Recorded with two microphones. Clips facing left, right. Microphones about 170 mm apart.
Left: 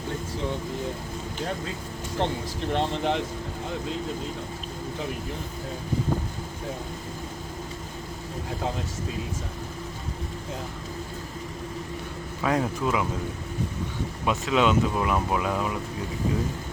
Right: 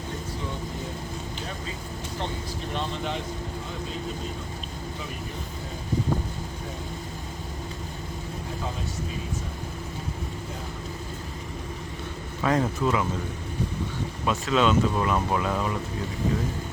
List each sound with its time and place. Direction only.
2.7 s speech: 70° left (ahead or behind)
12.4 s speech: 5° left (ahead or behind)
14.3 s speech: 15° left (ahead or behind)